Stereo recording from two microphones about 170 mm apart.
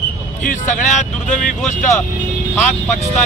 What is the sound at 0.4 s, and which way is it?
Speech, 50° left (ahead or behind).